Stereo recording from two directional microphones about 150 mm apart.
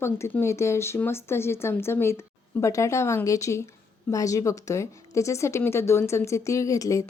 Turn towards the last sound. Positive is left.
turn(degrees=20)  # may be behind; listen again after turning